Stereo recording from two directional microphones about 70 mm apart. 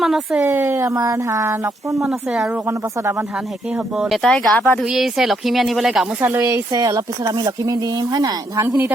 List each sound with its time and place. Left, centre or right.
0.0 s speech: centre
0.4 s speech: right
0.9 s speech: right
2.0 s speech: centre
2.6 s speech: right
3.9 s speech: centre
4.2 s speech: centre
4.5 s speech: left
4.9 s speech: centre
6.4 s speech: right